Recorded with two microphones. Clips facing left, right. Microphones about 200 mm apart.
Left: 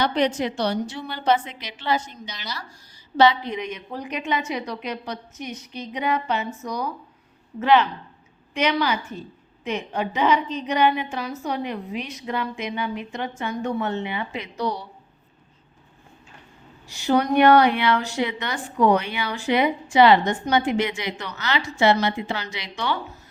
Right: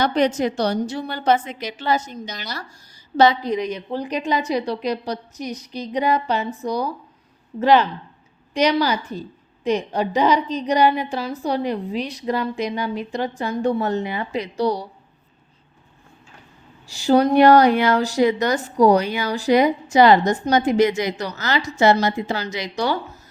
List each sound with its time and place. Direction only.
0.0 s a woman's voice: 45° right (ahead or behind)
16.9 s a woman's voice: 30° right (ahead or behind)